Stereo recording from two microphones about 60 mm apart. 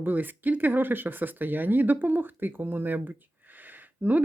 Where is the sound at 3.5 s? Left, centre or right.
Right.